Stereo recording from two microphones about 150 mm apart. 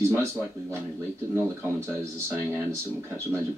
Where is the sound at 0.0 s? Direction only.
20° right (ahead or behind).